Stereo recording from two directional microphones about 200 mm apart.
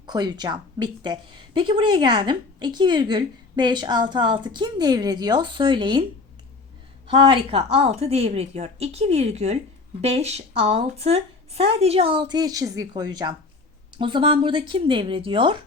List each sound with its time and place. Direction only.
0.0 s speech: 20° right (ahead or behind)
7.1 s a woman's voice: 25° right (ahead or behind)